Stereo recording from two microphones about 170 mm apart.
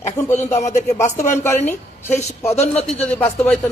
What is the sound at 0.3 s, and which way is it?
Speech, 40° left (ahead or behind).